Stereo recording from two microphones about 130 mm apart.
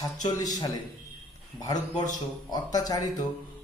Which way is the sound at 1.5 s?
30° left (ahead or behind).